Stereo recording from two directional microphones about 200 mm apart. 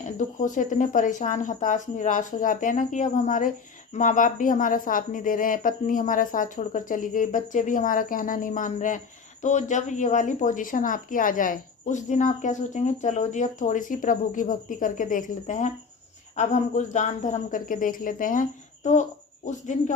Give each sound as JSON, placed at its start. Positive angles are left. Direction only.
{"t": 0.0, "sound": "a woman's voice", "side_deg": 40}